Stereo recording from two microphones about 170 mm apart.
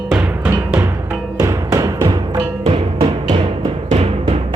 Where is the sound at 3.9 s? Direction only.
35° right (ahead or behind).